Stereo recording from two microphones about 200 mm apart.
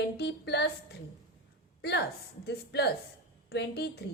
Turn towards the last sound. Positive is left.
turn(degrees=55)  # may be behind; listen again after turning